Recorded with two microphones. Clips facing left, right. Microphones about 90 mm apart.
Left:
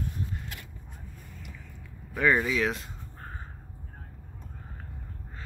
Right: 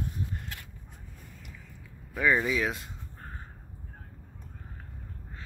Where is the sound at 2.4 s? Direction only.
20° right (ahead or behind).